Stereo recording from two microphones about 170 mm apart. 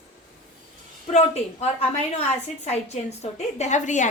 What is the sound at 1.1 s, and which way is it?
Speech, 40° left (ahead or behind).